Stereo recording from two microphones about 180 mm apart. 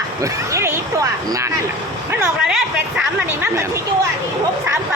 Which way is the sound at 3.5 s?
15° right (ahead or behind).